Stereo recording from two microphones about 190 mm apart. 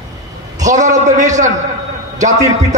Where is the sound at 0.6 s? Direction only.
40° right (ahead or behind).